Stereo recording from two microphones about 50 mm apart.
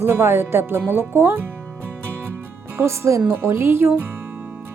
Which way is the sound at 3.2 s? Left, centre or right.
Right.